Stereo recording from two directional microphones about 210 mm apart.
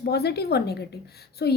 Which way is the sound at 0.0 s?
50° left (ahead or behind).